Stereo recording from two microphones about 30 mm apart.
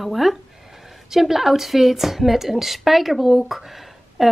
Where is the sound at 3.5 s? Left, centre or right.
Centre.